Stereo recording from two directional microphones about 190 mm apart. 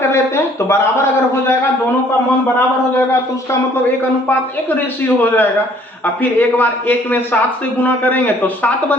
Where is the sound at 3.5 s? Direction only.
10° left (ahead or behind).